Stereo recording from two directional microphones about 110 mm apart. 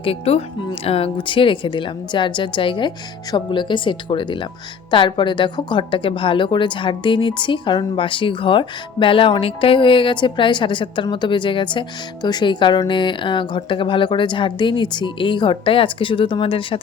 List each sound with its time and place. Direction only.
0.0 s a woman's voice: 60° left (ahead or behind)